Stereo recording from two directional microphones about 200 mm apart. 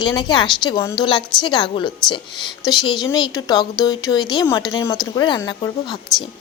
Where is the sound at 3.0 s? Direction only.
20° left (ahead or behind).